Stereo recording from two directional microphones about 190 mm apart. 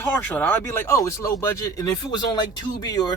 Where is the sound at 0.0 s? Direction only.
10° left (ahead or behind).